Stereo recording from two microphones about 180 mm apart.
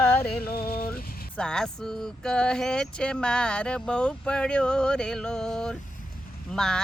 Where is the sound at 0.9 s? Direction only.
5° left (ahead or behind).